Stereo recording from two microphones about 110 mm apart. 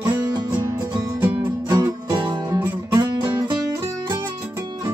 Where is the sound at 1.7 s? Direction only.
35° right (ahead or behind).